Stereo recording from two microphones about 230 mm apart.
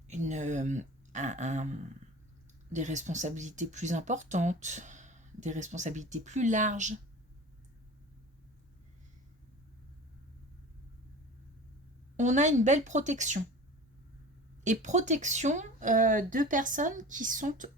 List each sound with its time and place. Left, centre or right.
0.1 s a sound: right
2.7 s speech: right
12.1 s speech: right
14.6 s speech: right